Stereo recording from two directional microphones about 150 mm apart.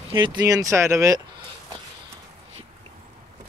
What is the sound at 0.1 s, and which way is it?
Speech, 30° right (ahead or behind).